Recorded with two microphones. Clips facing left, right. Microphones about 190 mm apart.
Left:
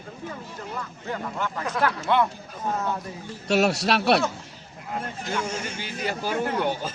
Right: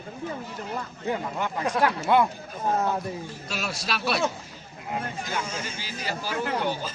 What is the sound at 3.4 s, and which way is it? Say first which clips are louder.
Speech: left 13 dB; 70° left (ahead or behind).